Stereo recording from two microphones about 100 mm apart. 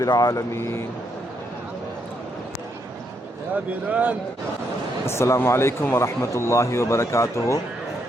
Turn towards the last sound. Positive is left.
turn(degrees=30)  # may be behind; listen again after turning